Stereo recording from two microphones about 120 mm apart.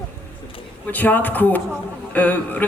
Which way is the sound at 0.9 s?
15° left (ahead or behind).